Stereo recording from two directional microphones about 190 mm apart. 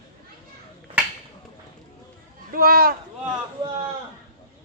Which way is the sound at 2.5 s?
50° right (ahead or behind).